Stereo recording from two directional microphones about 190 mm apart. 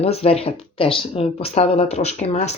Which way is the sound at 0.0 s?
30° left (ahead or behind).